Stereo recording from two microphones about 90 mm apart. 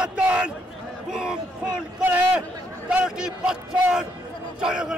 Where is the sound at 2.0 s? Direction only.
15° right (ahead or behind).